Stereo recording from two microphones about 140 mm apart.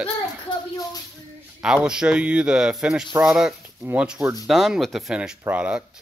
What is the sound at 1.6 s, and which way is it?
Speech, 5° right (ahead or behind).